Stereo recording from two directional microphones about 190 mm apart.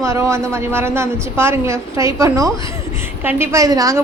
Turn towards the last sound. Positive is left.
turn(degrees=-20)  # may be behind; listen again after turning